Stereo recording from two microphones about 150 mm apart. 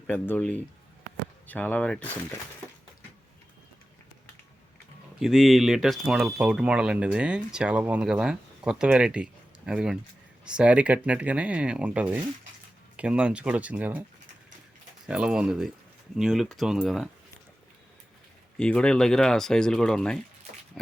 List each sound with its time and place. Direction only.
0.1 s speech: 10° left (ahead or behind)
5.2 s speech: centre (ahead or behind)
15.0 s speech: 5° right (ahead or behind)
18.5 s speech: 5° left (ahead or behind)